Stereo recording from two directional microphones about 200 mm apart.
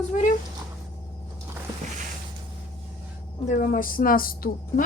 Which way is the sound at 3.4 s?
45° left (ahead or behind).